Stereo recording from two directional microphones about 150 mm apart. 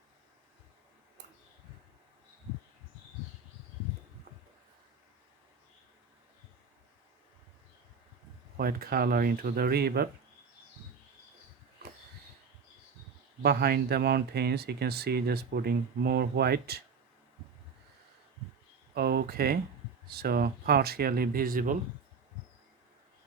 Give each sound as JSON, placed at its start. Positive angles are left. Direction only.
{"t": 8.5, "sound": "speech", "side_deg": -85}
{"t": 13.4, "sound": "speech", "side_deg": -90}
{"t": 18.9, "sound": "a sound", "side_deg": -90}
{"t": 20.1, "sound": "speech", "side_deg": -90}